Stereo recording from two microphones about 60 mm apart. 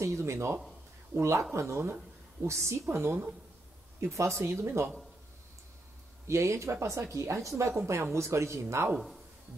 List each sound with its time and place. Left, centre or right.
0.0 s speech: right
4.1 s speech: right
6.2 s speech: right
7.7 s speech: right
8.9 s a man's voice: centre